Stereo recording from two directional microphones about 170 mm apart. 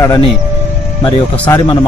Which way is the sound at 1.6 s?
25° left (ahead or behind).